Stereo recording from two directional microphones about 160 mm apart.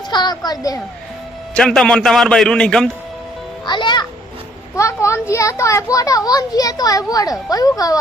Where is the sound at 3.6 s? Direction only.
30° left (ahead or behind).